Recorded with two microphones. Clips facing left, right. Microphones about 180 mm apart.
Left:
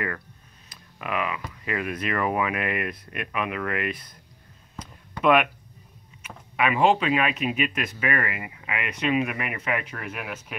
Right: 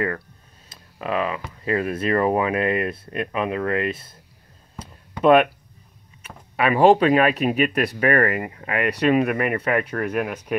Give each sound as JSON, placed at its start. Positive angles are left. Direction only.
{"t": 0.7, "sound": "a sound", "side_deg": -25}
{"t": 1.0, "sound": "speech", "side_deg": -35}
{"t": 5.2, "sound": "speech", "side_deg": -35}